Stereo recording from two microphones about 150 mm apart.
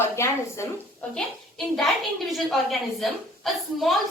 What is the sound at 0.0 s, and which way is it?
Speech, 20° left (ahead or behind).